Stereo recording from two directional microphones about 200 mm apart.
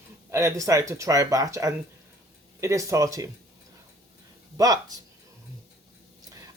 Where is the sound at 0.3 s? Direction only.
15° right (ahead or behind).